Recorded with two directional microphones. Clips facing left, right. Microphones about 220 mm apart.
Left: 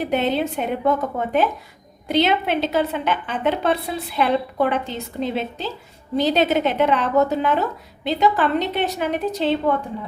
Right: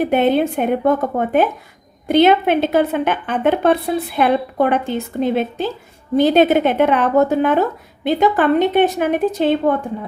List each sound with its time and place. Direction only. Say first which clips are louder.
0.0 s speech: right 6 dB; 55° right (ahead or behind)